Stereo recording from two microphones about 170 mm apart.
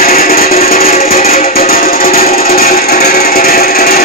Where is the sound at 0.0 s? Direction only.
60° left (ahead or behind).